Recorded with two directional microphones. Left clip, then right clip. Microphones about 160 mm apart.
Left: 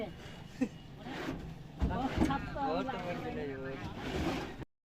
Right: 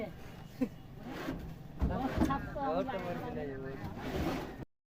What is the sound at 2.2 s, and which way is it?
Speech, 15° right (ahead or behind).